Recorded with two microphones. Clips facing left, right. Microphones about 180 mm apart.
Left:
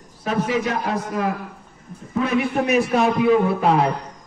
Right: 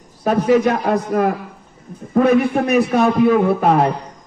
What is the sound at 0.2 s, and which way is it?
Speech, 45° right (ahead or behind).